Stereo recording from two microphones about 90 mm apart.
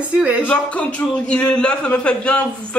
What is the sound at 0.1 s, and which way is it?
Speech, 15° right (ahead or behind).